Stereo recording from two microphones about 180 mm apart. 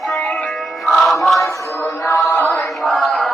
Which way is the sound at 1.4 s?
15° left (ahead or behind).